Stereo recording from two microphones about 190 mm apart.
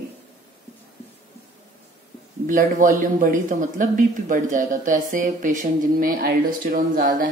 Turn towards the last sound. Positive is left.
turn(degrees=-50)  # may be behind; listen again after turning